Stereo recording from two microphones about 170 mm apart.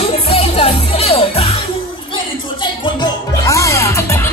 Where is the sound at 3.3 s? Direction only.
20° left (ahead or behind).